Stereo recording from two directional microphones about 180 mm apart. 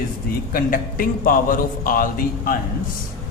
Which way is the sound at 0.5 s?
50° left (ahead or behind).